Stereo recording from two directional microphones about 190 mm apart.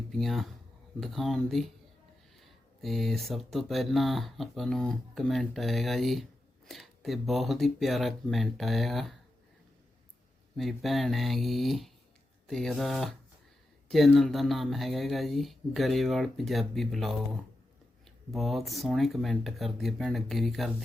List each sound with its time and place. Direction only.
0.1 s speech: centre (ahead or behind)
10.6 s speech: centre (ahead or behind)
18.3 s speech: centre (ahead or behind)